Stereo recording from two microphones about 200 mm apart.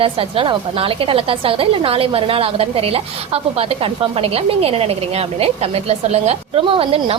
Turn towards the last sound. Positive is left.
turn(degrees=-30)  # may be behind; listen again after turning